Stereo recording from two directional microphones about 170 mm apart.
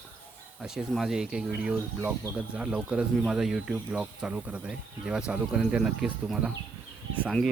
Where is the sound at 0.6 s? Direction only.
Centre (ahead or behind).